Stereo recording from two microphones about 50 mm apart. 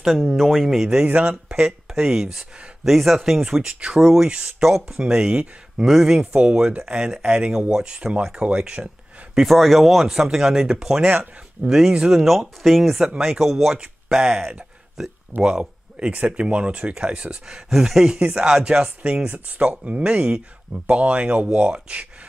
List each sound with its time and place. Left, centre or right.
0.0 s speech: centre
1.0 s speech: right
1.5 s speech: centre
8.5 s a sound: right
9.5 s speech: centre
12.2 s speech: centre
16.0 s speech: right
19.2 s speech: right